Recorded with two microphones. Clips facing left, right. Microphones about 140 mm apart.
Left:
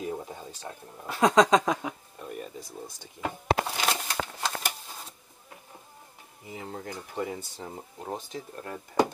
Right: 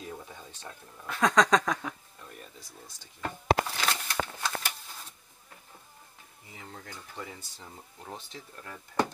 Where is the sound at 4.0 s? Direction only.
30° left (ahead or behind).